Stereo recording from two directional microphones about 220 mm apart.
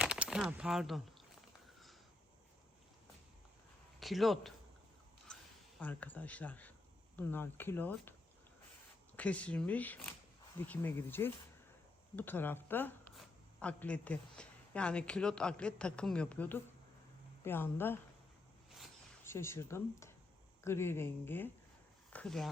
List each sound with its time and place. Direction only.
0.0 s speech: 5° right (ahead or behind)
4.0 s a man's voice: centre (ahead or behind)
5.3 s a sound: 5° left (ahead or behind)
5.8 s speech: 5° left (ahead or behind)
9.1 s speech: 5° left (ahead or behind)
19.2 s speech: 10° left (ahead or behind)